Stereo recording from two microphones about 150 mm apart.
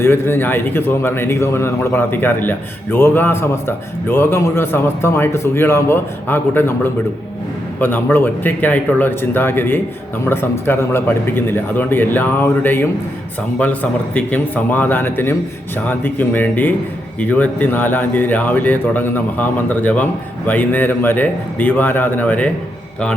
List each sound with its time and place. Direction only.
0.0 s a man's voice: 15° left (ahead or behind)